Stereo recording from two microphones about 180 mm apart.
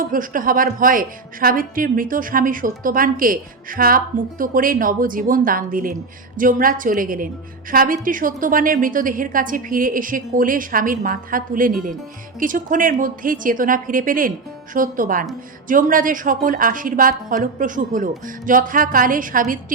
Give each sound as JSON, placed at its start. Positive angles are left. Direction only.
{"t": 0.0, "sound": "a woman's voice", "side_deg": -50}